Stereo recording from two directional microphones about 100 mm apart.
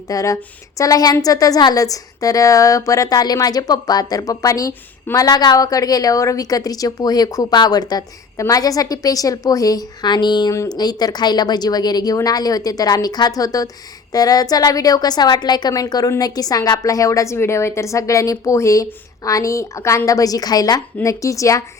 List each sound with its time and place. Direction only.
0.1 s a woman's voice: 35° left (ahead or behind)
10.5 s a woman's voice: 35° left (ahead or behind)